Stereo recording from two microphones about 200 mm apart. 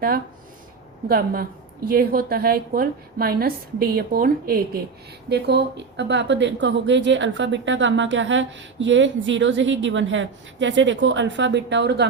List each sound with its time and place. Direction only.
1.0 s a woman's voice: 50° right (ahead or behind)